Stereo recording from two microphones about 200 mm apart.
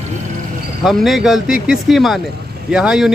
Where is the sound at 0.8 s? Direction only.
Centre (ahead or behind).